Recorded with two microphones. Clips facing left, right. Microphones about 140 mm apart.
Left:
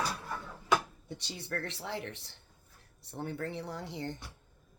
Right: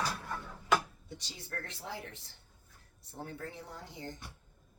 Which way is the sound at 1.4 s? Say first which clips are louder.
Left 6 dB; 75° left (ahead or behind).